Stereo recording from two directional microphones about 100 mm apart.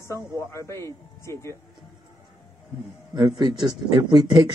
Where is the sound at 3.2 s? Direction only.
50° right (ahead or behind).